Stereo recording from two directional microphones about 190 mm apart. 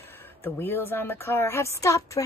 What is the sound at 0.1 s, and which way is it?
Speech, 10° left (ahead or behind).